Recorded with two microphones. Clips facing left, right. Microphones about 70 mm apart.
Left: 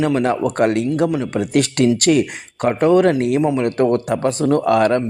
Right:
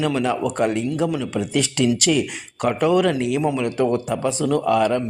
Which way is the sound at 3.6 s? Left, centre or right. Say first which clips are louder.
Left 4 dB; left.